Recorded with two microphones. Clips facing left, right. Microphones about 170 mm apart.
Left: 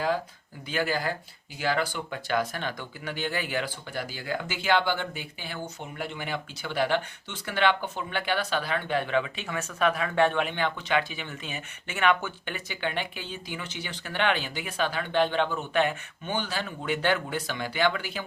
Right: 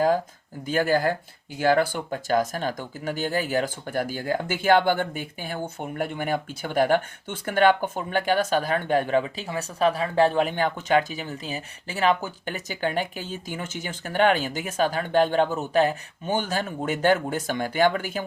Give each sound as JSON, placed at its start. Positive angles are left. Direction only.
{"t": 0.7, "sound": "speech", "side_deg": -45}